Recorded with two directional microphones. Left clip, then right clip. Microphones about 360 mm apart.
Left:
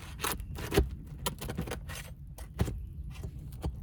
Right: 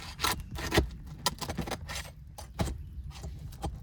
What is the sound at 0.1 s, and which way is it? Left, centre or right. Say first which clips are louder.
Rub: right 5 dB; right.